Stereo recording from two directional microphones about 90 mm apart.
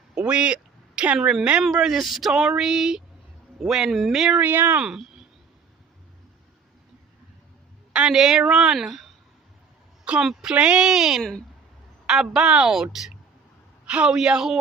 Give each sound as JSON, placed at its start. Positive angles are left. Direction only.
{"t": 0.1, "sound": "a woman's voice", "side_deg": -10}
{"t": 4.4, "sound": "speech", "side_deg": -20}
{"t": 4.8, "sound": "speech", "side_deg": -5}
{"t": 7.9, "sound": "a woman's voice", "side_deg": -5}
{"t": 11.2, "sound": "a woman's voice", "side_deg": 5}
{"t": 12.0, "sound": "speech", "side_deg": -5}